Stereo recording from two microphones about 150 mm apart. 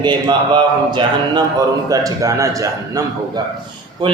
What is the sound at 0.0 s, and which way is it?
Speech, 30° right (ahead or behind).